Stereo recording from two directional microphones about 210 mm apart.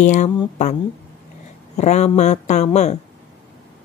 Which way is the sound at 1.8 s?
30° left (ahead or behind).